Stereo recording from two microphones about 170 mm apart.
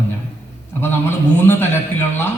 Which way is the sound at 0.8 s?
15° left (ahead or behind).